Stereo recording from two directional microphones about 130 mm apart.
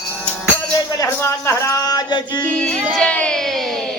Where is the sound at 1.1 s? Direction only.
20° left (ahead or behind).